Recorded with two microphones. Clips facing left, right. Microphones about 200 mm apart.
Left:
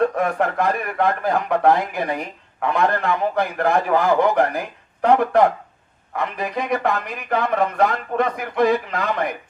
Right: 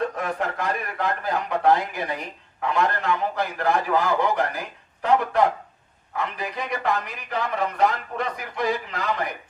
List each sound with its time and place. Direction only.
0.0 s speech: 55° left (ahead or behind)